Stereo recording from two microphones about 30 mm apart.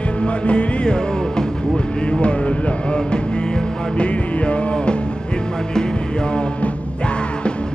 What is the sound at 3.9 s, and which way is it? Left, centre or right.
Music, left.